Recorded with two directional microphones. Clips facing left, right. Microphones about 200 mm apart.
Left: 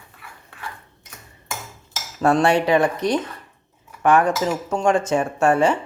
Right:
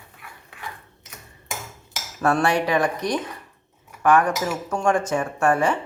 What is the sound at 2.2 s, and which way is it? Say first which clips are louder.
Cutlery: left 3 dB; 25° left (ahead or behind).